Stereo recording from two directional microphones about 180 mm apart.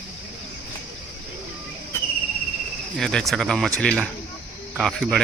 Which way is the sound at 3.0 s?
Centre (ahead or behind).